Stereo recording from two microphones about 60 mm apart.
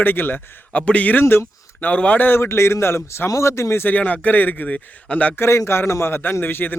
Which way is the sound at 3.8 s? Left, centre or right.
Left.